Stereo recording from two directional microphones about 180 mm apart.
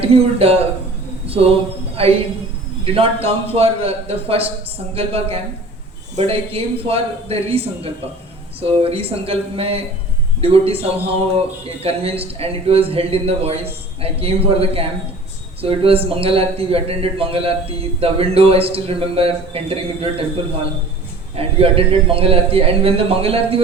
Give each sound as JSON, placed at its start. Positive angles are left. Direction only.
{"t": 0.0, "sound": "a man's voice", "side_deg": -35}
{"t": 21.3, "sound": "a man's voice", "side_deg": -30}